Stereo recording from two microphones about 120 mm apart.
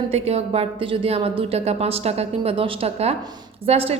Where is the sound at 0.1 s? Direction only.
60° right (ahead or behind).